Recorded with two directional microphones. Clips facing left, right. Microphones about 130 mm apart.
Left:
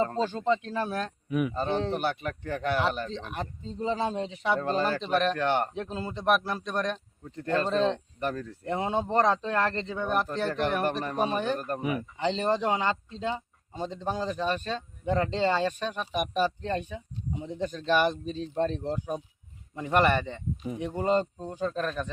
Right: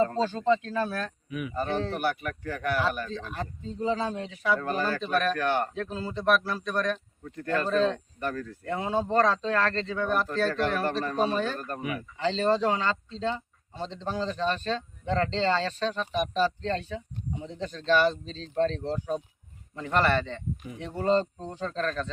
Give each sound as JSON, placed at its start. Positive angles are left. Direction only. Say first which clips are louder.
{"t": 0.0, "sound": "speech", "louder": "right 2 dB", "side_deg": 20}
{"t": 1.3, "sound": "speech", "louder": "left 10 dB", "side_deg": 50}
{"t": 1.5, "sound": "speech", "louder": "left 1 dB", "side_deg": 20}